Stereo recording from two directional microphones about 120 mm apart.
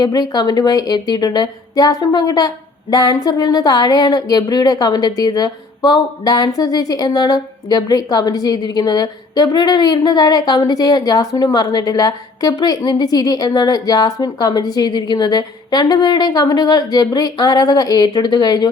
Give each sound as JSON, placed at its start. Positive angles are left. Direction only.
{"t": 0.0, "sound": "speech", "side_deg": 35}